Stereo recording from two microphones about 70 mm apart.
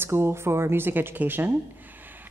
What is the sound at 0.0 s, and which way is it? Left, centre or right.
Speech, right.